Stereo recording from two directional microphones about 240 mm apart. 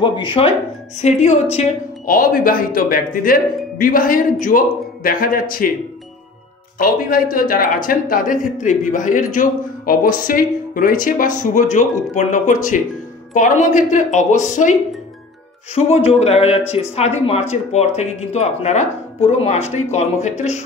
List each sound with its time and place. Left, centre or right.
0.0 s speech: centre; by 5.7 s left
6.8 s speech: left